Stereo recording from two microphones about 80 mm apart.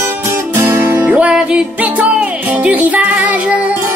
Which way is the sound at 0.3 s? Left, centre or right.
Right.